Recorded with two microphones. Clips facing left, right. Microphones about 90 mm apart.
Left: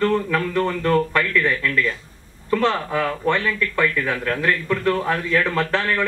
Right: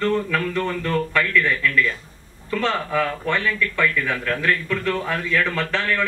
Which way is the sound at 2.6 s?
20° left (ahead or behind).